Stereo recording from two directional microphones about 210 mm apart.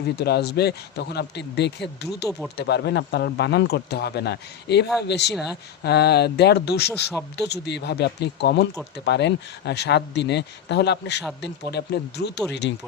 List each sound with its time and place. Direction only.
0.2 s speech: 50° left (ahead or behind)
5.3 s speech: 5° right (ahead or behind)
5.8 s speech: 50° left (ahead or behind)